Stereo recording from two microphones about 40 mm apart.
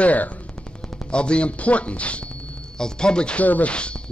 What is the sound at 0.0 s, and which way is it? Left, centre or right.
Speech, left.